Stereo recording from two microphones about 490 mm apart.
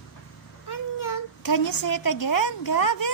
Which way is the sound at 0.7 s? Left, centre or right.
Left.